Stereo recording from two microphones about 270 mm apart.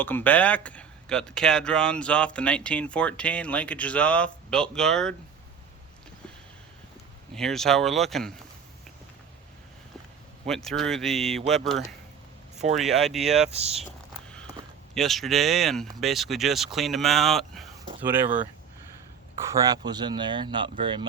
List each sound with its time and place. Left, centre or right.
0.0 s speech: centre
7.3 s speech: centre
10.4 s speech: centre
13.5 s speech: right
14.9 s speech: centre
19.5 s speech: centre